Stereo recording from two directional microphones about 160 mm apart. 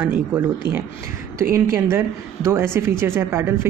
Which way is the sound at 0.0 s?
10° right (ahead or behind).